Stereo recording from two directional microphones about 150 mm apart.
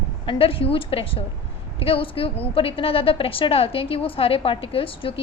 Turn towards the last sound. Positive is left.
turn(degrees=35)  # may be behind; listen again after turning